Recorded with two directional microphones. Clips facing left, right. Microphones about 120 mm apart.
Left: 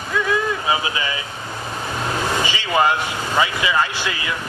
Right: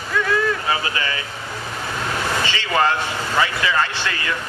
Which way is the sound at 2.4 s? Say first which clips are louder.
Left 1 dB; 15° left (ahead or behind).